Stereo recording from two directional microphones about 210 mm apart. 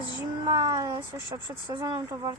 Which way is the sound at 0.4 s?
20° right (ahead or behind).